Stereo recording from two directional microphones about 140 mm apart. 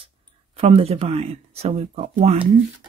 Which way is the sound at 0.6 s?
45° right (ahead or behind).